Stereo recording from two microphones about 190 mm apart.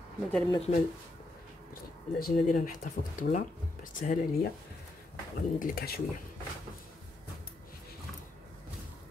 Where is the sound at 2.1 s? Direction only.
50° left (ahead or behind).